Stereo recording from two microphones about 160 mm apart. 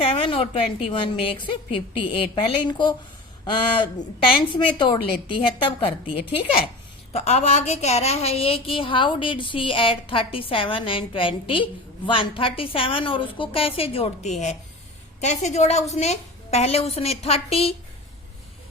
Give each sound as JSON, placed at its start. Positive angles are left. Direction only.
{"t": 0.0, "sound": "a woman's voice", "side_deg": 35}
{"t": 4.3, "sound": "a woman's voice", "side_deg": 30}